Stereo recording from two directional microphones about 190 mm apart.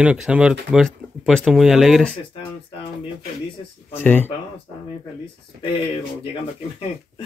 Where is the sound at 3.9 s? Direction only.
10° left (ahead or behind).